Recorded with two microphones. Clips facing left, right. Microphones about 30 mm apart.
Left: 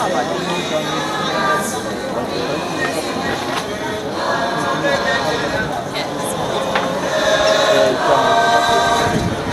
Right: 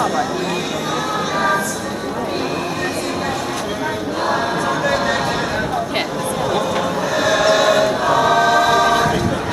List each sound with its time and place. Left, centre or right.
4.8 s a sound: centre
7.2 s choir: centre
8.7 s choir: centre